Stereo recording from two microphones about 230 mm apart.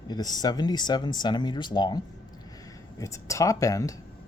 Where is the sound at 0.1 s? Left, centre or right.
Centre.